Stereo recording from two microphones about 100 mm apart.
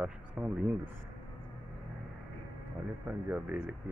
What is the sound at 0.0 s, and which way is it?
Speech, 10° right (ahead or behind).